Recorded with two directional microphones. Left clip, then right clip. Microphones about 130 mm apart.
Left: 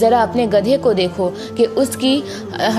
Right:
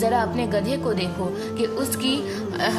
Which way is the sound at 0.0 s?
50° left (ahead or behind).